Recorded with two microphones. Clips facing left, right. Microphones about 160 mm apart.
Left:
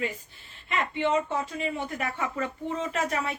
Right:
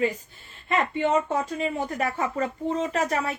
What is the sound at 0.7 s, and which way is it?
Speech, 45° right (ahead or behind).